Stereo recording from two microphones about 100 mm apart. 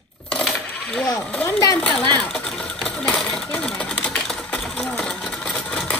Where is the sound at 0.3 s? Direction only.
10° left (ahead or behind).